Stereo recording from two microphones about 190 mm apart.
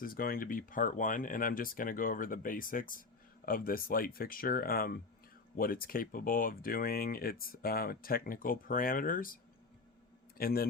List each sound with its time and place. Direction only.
0.0 s a man's voice: 50° left (ahead or behind)